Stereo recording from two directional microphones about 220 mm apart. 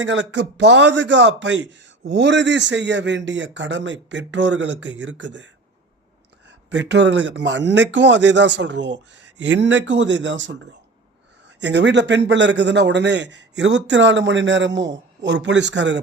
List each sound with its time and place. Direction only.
0.0 s speech: 55° right (ahead or behind)
6.7 s a man's voice: 55° right (ahead or behind)